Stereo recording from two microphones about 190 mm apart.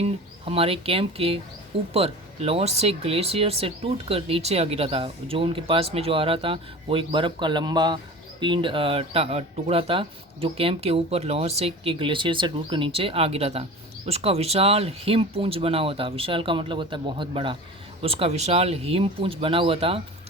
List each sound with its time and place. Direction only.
0.0 s speech: 30° right (ahead or behind)